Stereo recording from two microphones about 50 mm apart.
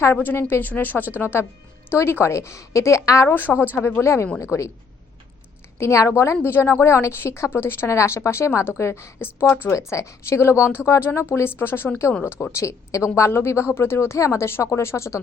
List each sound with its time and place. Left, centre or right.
0.1 s speech: left
1.1 s speech: left
2.1 s speech: left
3.2 s speech: left
4.0 s a woman's voice: left
4.4 s a woman's voice: left
5.8 s a woman's voice: left
7.5 s speech: left
7.9 s a woman's voice: left
9.7 s speech: left
10.4 s speech: left
10.8 s a woman's voice: left
11.9 s a woman's voice: left
13.1 s a woman's voice: left